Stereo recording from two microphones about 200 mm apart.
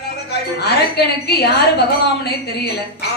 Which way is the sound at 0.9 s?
55° left (ahead or behind).